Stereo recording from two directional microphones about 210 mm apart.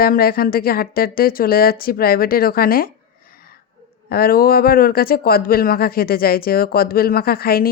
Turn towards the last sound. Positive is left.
turn(degrees=45)  # may be behind; listen again after turning